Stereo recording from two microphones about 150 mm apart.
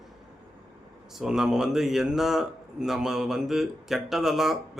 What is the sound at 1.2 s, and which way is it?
A man's voice, 5° right (ahead or behind).